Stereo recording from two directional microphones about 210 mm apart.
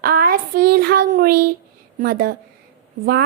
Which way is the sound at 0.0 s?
45° right (ahead or behind).